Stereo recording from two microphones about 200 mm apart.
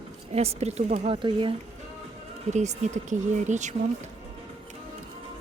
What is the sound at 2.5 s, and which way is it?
Speech, 35° right (ahead or behind).